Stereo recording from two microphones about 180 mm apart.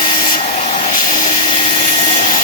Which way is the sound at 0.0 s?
30° left (ahead or behind).